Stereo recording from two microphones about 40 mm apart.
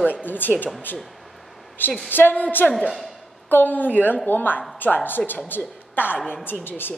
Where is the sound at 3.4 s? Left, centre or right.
Left.